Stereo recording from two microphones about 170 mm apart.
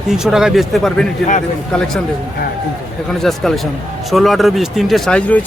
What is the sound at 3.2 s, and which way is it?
A man's voice, centre (ahead or behind).